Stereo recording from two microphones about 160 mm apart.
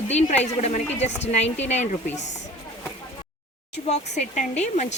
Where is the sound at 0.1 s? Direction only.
45° left (ahead or behind).